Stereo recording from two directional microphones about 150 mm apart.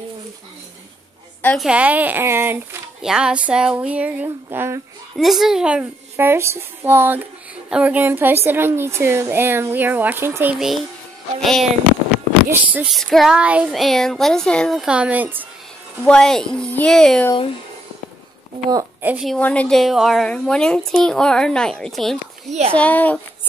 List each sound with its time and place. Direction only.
1.4 s a woman's voice: 5° left (ahead or behind)
1.7 s a woman's voice: 10° right (ahead or behind)
5.1 s a woman's voice: centre (ahead or behind)
12.7 s speech: centre (ahead or behind)
16.0 s speech: 5° left (ahead or behind)
18.7 s a woman's voice: 25° right (ahead or behind)
19.0 s speech: 5° right (ahead or behind)
19.3 s speech: 10° left (ahead or behind)
22.5 s speech: 40° right (ahead or behind)
22.8 s speech: 10° left (ahead or behind)